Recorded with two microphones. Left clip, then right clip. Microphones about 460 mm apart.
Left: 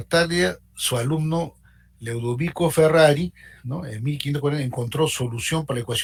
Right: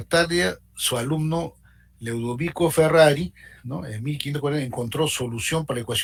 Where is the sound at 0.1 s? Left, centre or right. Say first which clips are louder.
Even; centre.